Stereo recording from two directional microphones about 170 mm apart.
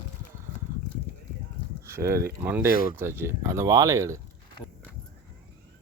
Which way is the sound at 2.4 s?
15° right (ahead or behind).